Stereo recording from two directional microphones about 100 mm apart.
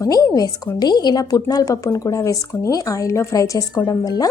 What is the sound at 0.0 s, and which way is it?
A woman's voice, 35° left (ahead or behind).